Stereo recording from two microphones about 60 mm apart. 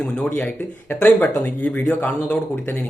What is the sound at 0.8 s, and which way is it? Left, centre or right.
Speech, left.